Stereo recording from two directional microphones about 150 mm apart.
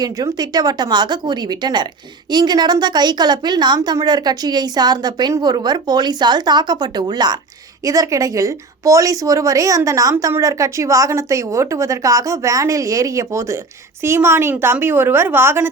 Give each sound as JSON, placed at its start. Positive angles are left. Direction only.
{"t": 0.0, "sound": "a woman's voice", "side_deg": -25}